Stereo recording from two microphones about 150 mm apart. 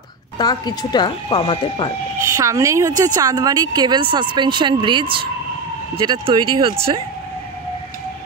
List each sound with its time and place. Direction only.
0.4 s speech: 25° left (ahead or behind)
2.3 s a woman's voice: 20° right (ahead or behind); by 7.0 s 40° right (ahead or behind)